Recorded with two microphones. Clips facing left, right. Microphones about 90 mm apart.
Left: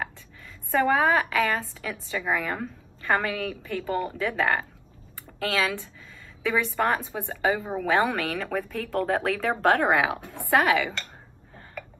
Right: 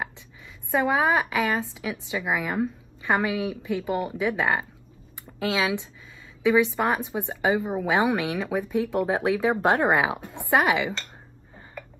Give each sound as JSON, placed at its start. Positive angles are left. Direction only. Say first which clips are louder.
{"t": 0.7, "sound": "a woman's voice", "louder": "left 1 dB", "side_deg": -10}